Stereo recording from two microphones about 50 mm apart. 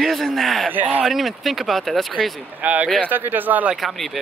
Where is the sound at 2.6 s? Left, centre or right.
Right.